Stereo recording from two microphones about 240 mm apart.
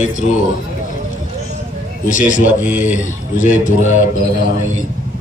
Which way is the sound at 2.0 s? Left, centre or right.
Left.